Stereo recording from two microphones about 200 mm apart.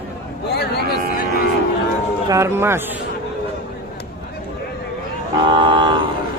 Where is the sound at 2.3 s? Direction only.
15° right (ahead or behind).